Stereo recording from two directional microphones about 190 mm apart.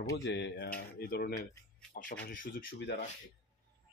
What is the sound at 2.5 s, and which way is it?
Speech, 65° left (ahead or behind).